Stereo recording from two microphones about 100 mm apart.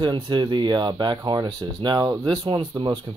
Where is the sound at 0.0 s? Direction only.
45° right (ahead or behind).